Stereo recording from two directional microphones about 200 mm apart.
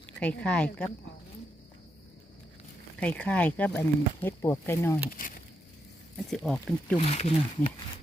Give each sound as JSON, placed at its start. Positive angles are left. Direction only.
{"t": 0.2, "sound": "a woman's voice", "side_deg": 5}
{"t": 3.0, "sound": "speech", "side_deg": 5}
{"t": 5.1, "sound": "speech", "side_deg": 45}
{"t": 6.3, "sound": "a woman's voice", "side_deg": 0}
{"t": 7.0, "sound": "speech", "side_deg": 30}